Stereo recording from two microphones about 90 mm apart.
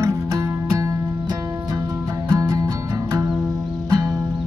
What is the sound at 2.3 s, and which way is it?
Music, 50° right (ahead or behind).